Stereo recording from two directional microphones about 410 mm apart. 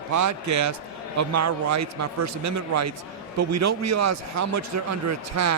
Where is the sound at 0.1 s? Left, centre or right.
Right.